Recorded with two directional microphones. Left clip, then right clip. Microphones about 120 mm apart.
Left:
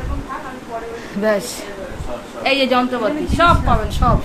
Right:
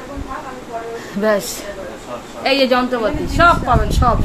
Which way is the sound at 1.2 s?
20° right (ahead or behind).